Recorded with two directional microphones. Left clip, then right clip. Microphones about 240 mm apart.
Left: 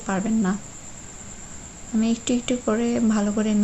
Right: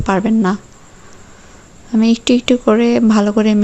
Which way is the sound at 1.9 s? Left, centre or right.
Right.